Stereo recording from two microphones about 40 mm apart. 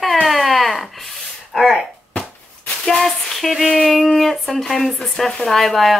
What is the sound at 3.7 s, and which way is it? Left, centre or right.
Speech, centre.